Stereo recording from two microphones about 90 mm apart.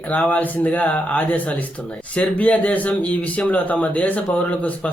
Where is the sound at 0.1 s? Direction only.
15° left (ahead or behind).